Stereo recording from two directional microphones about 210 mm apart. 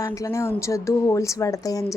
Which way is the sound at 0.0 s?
15° left (ahead or behind).